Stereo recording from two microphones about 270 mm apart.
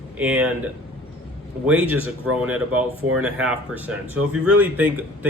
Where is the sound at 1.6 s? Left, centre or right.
Centre.